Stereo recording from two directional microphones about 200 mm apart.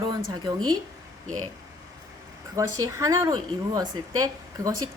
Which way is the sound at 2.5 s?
15° right (ahead or behind).